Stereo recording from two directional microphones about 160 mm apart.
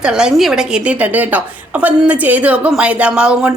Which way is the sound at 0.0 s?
5° right (ahead or behind).